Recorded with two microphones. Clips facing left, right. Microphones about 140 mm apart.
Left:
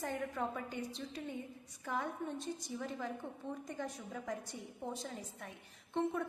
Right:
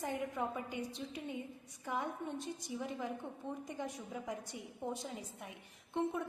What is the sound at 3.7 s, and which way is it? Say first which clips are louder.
A woman's voice: even; 15° right (ahead or behind).